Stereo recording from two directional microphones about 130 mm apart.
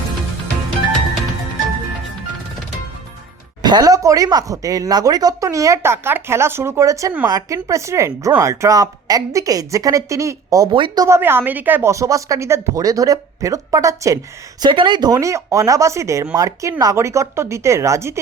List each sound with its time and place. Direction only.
3.6 s speech: 30° right (ahead or behind)
11.0 s speech: 20° right (ahead or behind)
14.6 s speech: 40° right (ahead or behind); by 18.2 s 20° right (ahead or behind)